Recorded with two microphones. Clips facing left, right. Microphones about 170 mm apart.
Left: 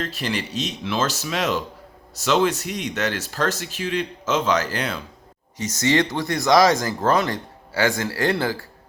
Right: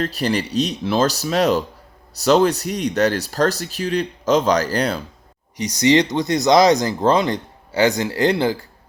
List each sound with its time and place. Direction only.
0.0 s speech: 35° right (ahead or behind)
5.5 s speech: 15° right (ahead or behind)